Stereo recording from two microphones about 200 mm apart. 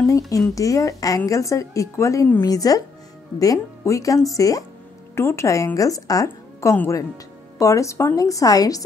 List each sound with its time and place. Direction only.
0.6 s a woman's voice: 15° left (ahead or behind)